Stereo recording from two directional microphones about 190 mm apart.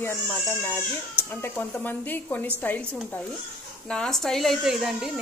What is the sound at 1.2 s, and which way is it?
A child's voice, 10° left (ahead or behind).